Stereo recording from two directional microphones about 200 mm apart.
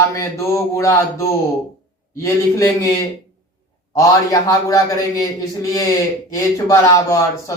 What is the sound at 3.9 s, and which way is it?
Speech, 15° left (ahead or behind).